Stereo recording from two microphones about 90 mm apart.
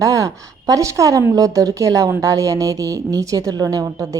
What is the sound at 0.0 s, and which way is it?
Speech, 35° right (ahead or behind).